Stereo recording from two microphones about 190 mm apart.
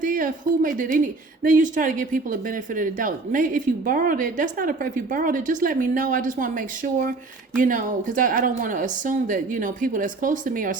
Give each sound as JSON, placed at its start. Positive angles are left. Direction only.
{"t": 0.0, "sound": "a woman's voice", "side_deg": -45}